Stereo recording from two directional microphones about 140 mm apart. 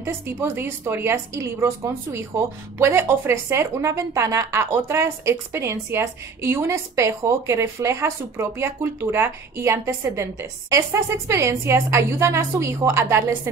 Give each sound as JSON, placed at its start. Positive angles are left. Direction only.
{"t": 0.0, "sound": "a woman's voice", "side_deg": -15}
{"t": 2.8, "sound": "a woman's voice", "side_deg": -15}